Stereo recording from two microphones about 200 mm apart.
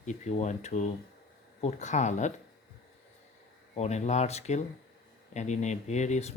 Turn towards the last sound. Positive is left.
turn(degrees=35)  # may be behind; listen again after turning